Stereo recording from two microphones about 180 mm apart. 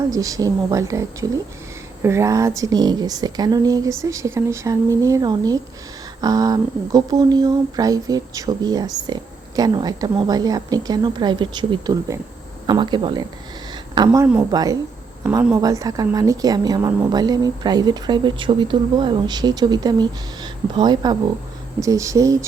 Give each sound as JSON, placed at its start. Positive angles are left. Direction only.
{"t": 0.1, "sound": "a woman's voice", "side_deg": -20}